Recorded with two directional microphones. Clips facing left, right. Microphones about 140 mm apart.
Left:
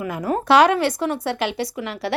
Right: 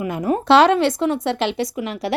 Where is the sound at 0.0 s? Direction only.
25° right (ahead or behind).